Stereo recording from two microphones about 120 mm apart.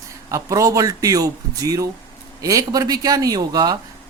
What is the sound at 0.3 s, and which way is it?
A man's voice, 25° right (ahead or behind).